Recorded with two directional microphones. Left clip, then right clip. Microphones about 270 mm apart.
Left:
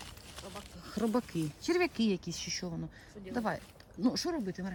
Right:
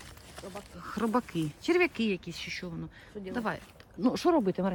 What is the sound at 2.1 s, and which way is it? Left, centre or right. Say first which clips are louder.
Speech: right 1 dB; left.